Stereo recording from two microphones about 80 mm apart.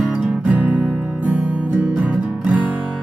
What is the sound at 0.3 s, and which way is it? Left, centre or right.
Music, centre.